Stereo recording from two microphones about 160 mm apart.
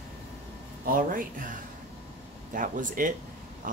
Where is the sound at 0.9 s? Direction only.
55° right (ahead or behind).